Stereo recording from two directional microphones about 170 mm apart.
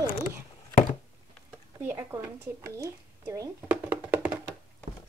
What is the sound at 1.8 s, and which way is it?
Speech, 15° right (ahead or behind).